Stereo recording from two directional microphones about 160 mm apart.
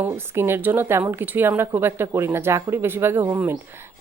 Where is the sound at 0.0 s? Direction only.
15° right (ahead or behind).